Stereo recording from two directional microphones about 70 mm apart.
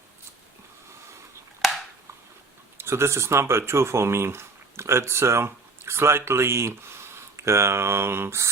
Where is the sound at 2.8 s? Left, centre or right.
Right.